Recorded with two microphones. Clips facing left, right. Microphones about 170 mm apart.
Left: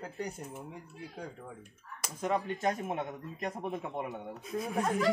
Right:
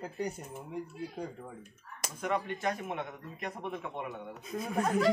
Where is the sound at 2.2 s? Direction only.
35° left (ahead or behind).